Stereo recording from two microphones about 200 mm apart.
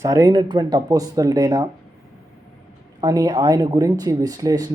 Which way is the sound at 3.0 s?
20° right (ahead or behind).